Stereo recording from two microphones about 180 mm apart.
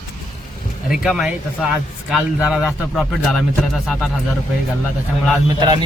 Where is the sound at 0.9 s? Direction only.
Centre (ahead or behind).